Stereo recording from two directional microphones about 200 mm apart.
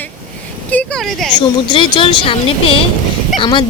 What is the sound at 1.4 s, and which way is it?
A woman's voice, 25° left (ahead or behind).